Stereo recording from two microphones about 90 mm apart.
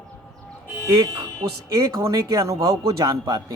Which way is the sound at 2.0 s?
35° right (ahead or behind).